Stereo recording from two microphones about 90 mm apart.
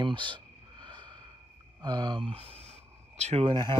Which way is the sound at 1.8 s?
55° right (ahead or behind).